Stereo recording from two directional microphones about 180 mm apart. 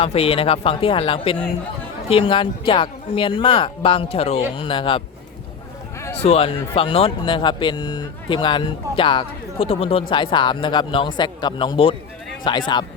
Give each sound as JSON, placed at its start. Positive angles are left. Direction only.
{"t": 0.0, "sound": "speech", "side_deg": 35}
{"t": 6.2, "sound": "speech", "side_deg": 35}